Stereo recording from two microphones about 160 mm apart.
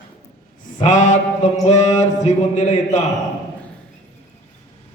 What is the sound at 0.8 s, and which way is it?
Speech, 50° left (ahead or behind).